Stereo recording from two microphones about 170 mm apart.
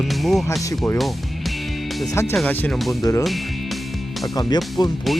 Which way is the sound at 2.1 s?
15° left (ahead or behind).